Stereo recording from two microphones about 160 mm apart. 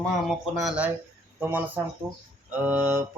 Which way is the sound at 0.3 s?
Centre (ahead or behind).